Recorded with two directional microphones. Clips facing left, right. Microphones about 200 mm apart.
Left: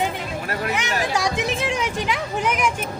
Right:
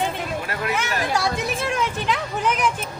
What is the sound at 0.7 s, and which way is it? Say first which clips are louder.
Speech: right 1 dB; 15° left (ahead or behind).